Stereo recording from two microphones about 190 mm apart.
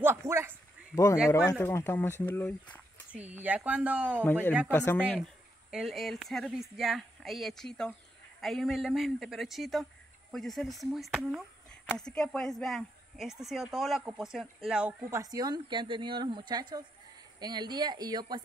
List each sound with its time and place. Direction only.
0.0 s speech: 15° right (ahead or behind)
1.3 s speech: 15° left (ahead or behind)
3.2 s speech: 10° right (ahead or behind)
4.6 s speech: 10° left (ahead or behind)
5.7 s speech: centre (ahead or behind)
15.0 s speech: 20° right (ahead or behind)